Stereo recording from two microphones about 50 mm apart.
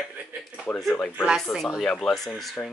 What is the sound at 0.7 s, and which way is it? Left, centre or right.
Speech, left.